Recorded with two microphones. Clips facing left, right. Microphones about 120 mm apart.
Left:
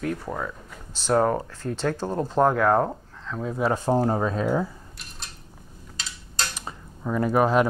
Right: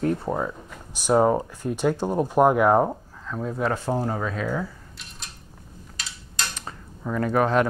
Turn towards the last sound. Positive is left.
turn(degrees=10)  # may be behind; listen again after turning